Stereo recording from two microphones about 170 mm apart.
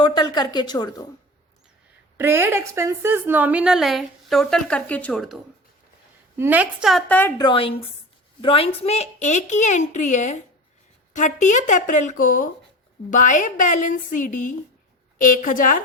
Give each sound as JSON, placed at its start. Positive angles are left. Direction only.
{"t": 0.0, "sound": "speech", "side_deg": 25}
{"t": 2.1, "sound": "a woman's voice", "side_deg": -15}
{"t": 6.3, "sound": "a woman's voice", "side_deg": -10}
{"t": 7.1, "sound": "a woman's voice", "side_deg": 15}
{"t": 7.4, "sound": "a woman's voice", "side_deg": 30}